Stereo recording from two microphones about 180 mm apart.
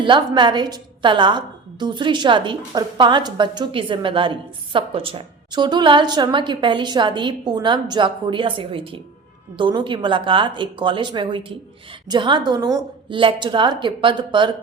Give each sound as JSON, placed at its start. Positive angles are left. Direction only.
{"t": 0.0, "sound": "a woman's voice", "side_deg": -25}